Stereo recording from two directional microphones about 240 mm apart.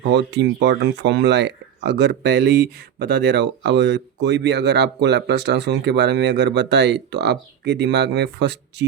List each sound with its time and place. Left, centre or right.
0.1 s speech: right